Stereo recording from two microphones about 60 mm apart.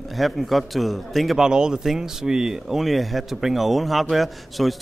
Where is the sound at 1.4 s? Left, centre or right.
Centre.